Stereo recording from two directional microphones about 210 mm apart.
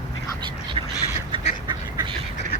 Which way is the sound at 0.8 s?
25° right (ahead or behind).